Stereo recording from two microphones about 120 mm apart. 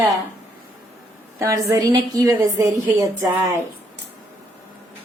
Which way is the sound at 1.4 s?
25° right (ahead or behind).